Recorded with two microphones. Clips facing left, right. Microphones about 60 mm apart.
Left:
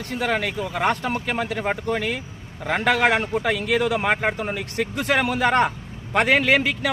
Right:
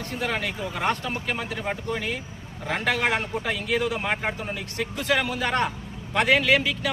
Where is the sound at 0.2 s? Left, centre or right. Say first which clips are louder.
Left 5 dB; left.